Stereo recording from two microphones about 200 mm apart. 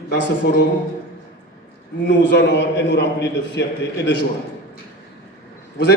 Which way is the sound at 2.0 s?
65° left (ahead or behind).